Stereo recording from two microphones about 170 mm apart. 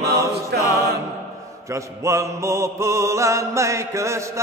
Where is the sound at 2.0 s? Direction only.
15° right (ahead or behind).